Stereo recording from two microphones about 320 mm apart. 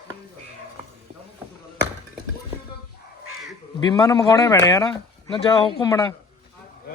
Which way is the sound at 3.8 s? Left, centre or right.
Centre.